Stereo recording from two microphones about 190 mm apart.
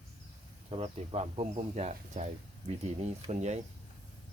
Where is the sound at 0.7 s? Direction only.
30° right (ahead or behind).